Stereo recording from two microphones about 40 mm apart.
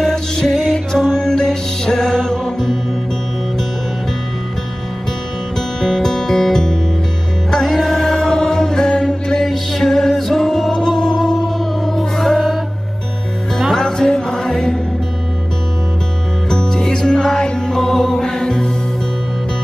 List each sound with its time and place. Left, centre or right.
0.0 s music: centre
5.8 s music: centre
13.7 s music: centre
16.4 s music: centre